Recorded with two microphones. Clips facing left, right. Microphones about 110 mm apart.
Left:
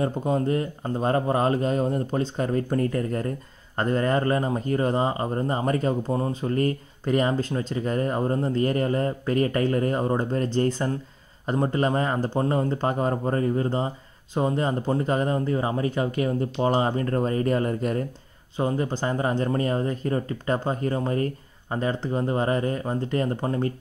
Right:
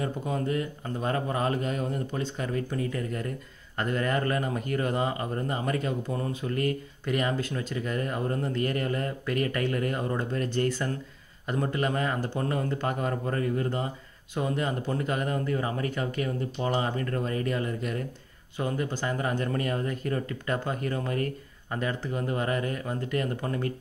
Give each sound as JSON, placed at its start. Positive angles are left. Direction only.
{"t": 0.0, "sound": "speech", "side_deg": 35}